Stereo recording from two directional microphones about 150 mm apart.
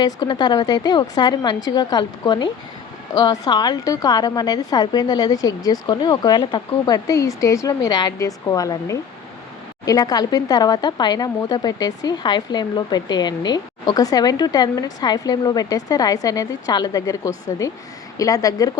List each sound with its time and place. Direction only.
0.0 s speech: 30° left (ahead or behind)